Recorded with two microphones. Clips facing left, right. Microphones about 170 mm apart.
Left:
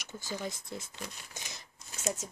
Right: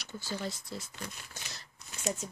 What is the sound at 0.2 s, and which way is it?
Speech, 15° left (ahead or behind).